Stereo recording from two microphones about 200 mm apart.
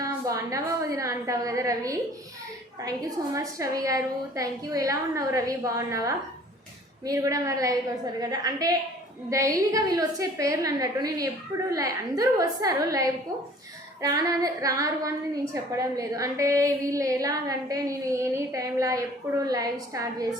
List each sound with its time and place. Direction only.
0.0 s a woman's voice: 15° right (ahead or behind)
3.3 s a woman's voice: 15° right (ahead or behind)